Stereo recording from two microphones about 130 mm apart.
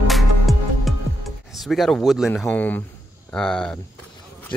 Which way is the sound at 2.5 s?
15° left (ahead or behind).